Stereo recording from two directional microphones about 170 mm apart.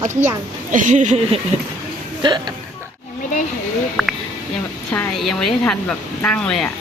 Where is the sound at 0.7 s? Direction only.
50° right (ahead or behind).